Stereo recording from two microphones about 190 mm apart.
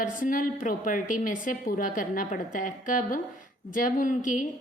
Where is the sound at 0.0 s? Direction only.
45° left (ahead or behind).